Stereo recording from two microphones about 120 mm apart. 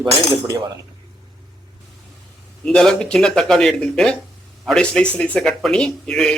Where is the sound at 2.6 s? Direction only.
5° left (ahead or behind).